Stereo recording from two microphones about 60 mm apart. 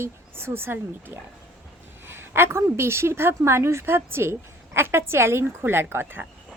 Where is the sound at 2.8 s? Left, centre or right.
Right.